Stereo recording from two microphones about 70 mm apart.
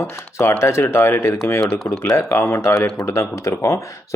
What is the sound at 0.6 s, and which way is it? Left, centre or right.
Speech, left.